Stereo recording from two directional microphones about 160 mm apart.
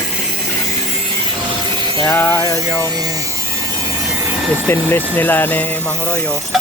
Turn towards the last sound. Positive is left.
turn(degrees=10)  # may be behind; listen again after turning